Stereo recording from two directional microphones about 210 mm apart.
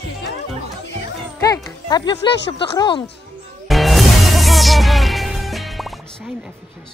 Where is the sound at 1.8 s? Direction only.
20° left (ahead or behind).